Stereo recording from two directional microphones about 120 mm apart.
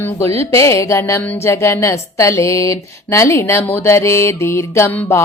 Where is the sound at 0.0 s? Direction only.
20° left (ahead or behind).